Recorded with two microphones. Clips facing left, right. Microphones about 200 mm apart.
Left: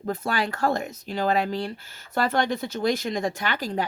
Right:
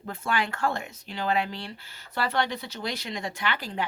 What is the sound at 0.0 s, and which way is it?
Speech, 40° left (ahead or behind).